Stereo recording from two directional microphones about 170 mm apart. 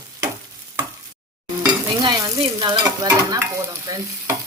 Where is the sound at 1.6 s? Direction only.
25° right (ahead or behind).